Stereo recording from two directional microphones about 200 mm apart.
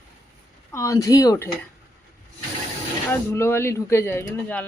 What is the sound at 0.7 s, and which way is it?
Speech, 15° left (ahead or behind).